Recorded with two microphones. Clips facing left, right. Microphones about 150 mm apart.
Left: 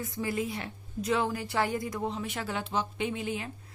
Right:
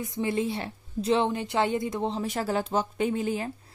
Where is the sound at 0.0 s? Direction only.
20° right (ahead or behind); by 3.5 s 40° right (ahead or behind).